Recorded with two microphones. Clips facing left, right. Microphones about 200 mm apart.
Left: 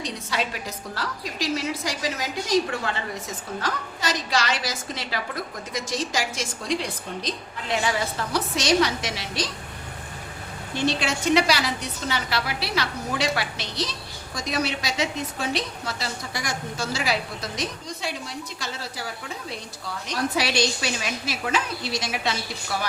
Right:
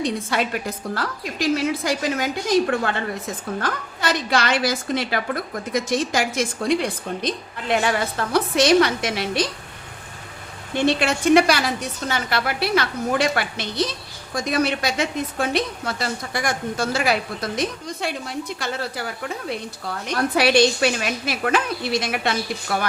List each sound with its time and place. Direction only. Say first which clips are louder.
0.0 s a woman's voice: right 6 dB; 55° right (ahead or behind)
10.8 s a woman's voice: right 5 dB; 55° right (ahead or behind)